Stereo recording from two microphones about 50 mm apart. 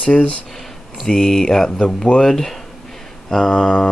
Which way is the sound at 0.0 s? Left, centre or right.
Left.